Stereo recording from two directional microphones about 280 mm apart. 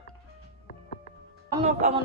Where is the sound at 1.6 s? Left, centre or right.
Right.